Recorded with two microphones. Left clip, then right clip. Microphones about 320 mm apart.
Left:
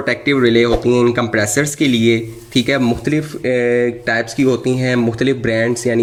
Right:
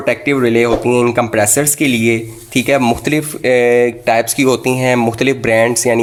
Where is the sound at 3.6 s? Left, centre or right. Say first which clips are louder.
Right 3 dB; right.